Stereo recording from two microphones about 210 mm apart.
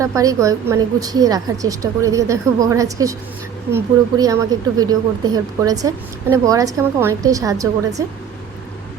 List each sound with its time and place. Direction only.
0.0 s a woman's voice: 15° right (ahead or behind)